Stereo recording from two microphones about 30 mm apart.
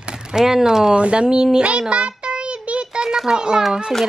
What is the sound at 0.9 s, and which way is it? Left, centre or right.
Speech, right.